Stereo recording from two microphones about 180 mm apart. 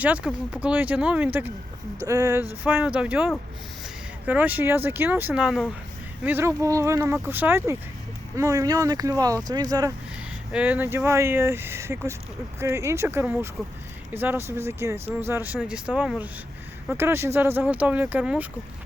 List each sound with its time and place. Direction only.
0.0 s speech: 5° right (ahead or behind)
10.5 s speech: 10° right (ahead or behind)